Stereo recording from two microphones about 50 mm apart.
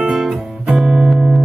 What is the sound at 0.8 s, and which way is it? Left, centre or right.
Music, centre.